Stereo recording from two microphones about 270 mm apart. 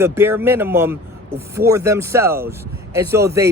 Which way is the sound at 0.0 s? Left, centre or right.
Centre.